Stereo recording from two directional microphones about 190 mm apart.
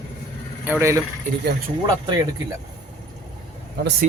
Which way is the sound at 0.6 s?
10° right (ahead or behind).